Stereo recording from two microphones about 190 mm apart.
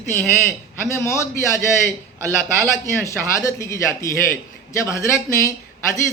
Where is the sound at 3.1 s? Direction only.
15° left (ahead or behind).